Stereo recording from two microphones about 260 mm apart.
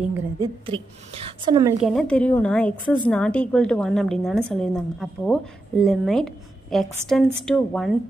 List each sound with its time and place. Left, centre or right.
0.4 s a woman's voice: centre
1.8 s a woman's voice: centre